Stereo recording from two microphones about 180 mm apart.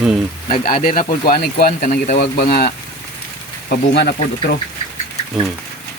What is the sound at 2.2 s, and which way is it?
Speech, 55° left (ahead or behind).